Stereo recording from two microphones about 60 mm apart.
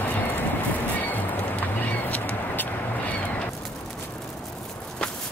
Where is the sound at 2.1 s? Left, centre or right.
Left.